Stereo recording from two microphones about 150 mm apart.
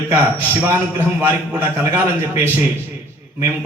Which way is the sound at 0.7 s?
15° right (ahead or behind).